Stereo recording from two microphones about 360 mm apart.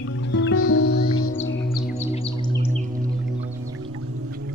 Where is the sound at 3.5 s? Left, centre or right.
Centre.